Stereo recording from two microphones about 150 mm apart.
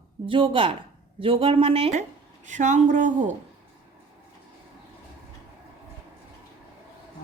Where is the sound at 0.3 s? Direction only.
35° right (ahead or behind); by 3.3 s 55° right (ahead or behind).